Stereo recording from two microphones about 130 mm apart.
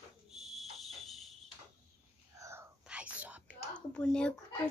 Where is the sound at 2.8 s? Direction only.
10° right (ahead or behind).